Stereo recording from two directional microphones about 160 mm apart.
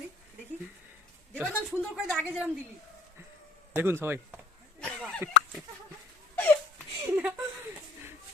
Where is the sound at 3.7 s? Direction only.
15° right (ahead or behind).